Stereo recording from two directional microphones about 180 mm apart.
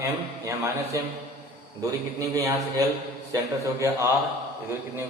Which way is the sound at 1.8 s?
20° right (ahead or behind).